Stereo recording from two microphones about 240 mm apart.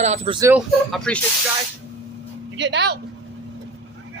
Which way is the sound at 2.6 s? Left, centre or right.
Right.